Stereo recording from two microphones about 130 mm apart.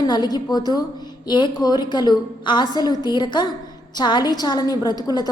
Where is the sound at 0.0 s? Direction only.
30° left (ahead or behind).